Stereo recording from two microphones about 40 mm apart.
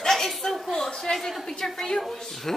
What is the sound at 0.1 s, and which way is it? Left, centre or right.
A woman's voice, centre.